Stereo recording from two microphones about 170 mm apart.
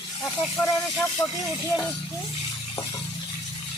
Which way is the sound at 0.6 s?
10° left (ahead or behind).